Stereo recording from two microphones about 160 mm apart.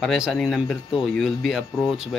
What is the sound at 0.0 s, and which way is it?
Speech, centre (ahead or behind).